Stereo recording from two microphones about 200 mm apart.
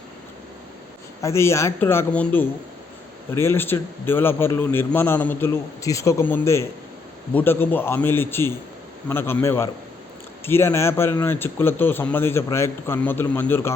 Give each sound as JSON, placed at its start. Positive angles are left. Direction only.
{"t": 1.2, "sound": "speech", "side_deg": 15}